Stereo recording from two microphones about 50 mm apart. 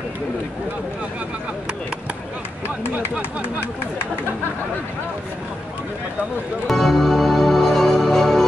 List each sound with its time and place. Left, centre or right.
2.9 s speech: right
6.7 s music: centre